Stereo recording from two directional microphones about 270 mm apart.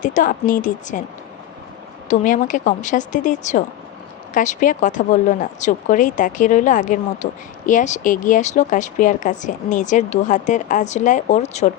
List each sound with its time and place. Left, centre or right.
0.0 s a woman's voice: left
2.0 s a woman's voice: left